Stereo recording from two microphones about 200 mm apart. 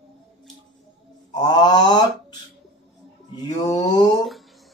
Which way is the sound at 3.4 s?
20° left (ahead or behind).